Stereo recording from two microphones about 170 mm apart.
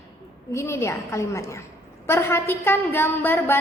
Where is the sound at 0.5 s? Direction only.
15° left (ahead or behind).